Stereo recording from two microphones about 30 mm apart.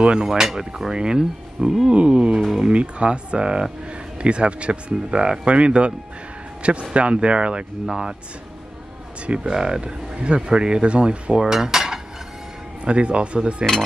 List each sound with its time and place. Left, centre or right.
0.2 s cutlery: centre
0.9 s speech: right
7.9 s speech: right
9.2 s speech: right
9.5 s cutlery: centre
9.8 s speech: right
11.4 s cutlery: centre
12.8 s speech: right